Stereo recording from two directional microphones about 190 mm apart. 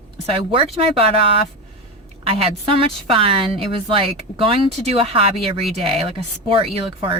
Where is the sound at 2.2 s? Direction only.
30° right (ahead or behind).